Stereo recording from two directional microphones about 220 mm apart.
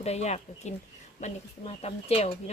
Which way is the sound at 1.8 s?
30° left (ahead or behind).